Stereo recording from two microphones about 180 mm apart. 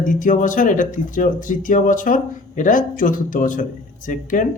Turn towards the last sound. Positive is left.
turn(degrees=45)  # may be behind; listen again after turning